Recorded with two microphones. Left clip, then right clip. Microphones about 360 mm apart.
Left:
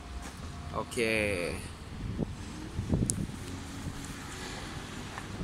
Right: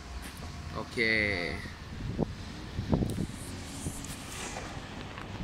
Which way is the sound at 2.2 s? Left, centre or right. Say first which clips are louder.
Right 4 dB; right.